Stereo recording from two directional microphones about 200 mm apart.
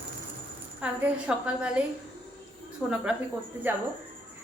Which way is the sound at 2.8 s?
Centre (ahead or behind).